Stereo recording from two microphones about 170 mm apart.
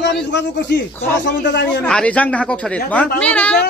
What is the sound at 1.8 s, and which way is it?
Speech, 5° left (ahead or behind).